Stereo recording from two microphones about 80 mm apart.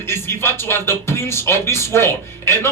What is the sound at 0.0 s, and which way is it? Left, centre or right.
Speech, left.